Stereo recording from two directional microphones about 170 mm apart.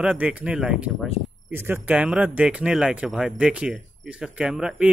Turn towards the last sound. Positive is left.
turn(degrees=-5)  # may be behind; listen again after turning